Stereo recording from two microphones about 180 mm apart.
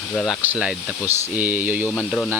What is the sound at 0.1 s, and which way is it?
Speech, 5° left (ahead or behind).